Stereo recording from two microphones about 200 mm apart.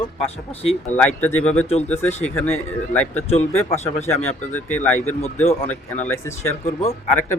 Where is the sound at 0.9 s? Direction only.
5° left (ahead or behind).